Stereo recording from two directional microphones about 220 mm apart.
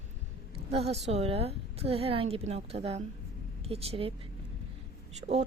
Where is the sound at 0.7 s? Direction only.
25° right (ahead or behind).